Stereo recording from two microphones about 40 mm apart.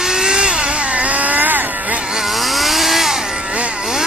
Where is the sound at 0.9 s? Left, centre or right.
Right.